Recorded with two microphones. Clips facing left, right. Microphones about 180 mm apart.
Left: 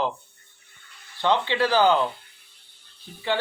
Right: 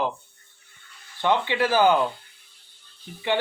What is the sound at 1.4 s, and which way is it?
Speech, 15° right (ahead or behind).